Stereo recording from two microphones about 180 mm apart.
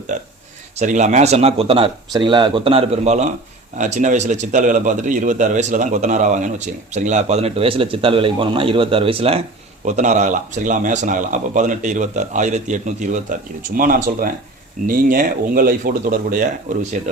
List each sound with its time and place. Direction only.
0.1 s a man's voice: 40° right (ahead or behind)
9.8 s speech: 40° right (ahead or behind)